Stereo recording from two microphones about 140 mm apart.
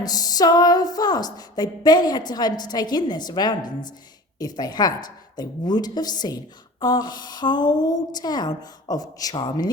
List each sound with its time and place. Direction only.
0.0 s a woman's voice: 25° left (ahead or behind)